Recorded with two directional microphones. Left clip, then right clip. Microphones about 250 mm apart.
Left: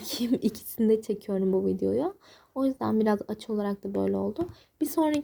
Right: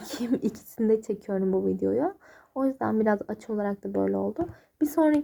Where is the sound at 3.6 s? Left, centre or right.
Left.